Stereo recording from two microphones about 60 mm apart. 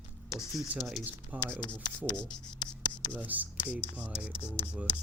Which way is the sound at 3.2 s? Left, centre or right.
Right.